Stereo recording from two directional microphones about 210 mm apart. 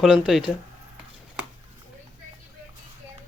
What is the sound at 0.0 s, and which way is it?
Speech, centre (ahead or behind).